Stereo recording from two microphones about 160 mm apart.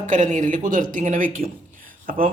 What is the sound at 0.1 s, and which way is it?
Speech, 50° right (ahead or behind).